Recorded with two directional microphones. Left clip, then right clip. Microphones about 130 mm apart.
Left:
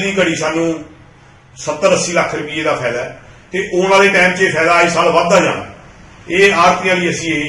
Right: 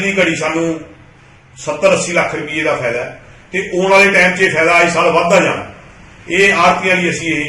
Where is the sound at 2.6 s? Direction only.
Centre (ahead or behind).